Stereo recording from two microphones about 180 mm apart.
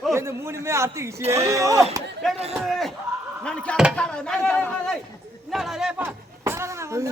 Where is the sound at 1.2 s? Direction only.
35° right (ahead or behind).